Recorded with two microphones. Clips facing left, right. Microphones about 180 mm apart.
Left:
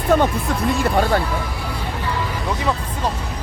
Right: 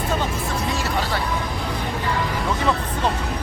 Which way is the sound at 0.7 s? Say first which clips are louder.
Left 9 dB; 55° left (ahead or behind).